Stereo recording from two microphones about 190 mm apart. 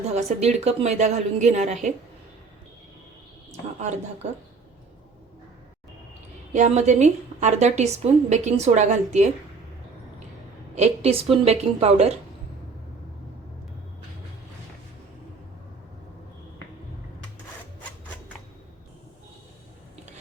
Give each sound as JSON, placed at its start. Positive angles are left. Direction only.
{"t": 0.1, "sound": "a woman's voice", "side_deg": -35}
{"t": 3.8, "sound": "a woman's voice", "side_deg": -35}
{"t": 6.5, "sound": "a woman's voice", "side_deg": -40}
{"t": 10.8, "sound": "a woman's voice", "side_deg": -35}